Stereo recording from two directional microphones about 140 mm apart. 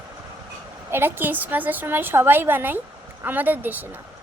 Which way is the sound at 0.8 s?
15° right (ahead or behind).